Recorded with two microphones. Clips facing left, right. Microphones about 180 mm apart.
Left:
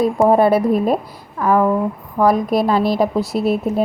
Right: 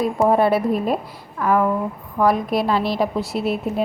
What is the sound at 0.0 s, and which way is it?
A woman's voice, 40° left (ahead or behind).